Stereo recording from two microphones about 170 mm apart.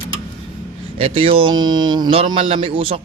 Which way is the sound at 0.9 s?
35° right (ahead or behind).